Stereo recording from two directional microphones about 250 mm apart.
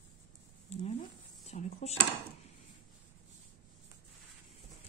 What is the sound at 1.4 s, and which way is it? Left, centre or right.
Dishes, left.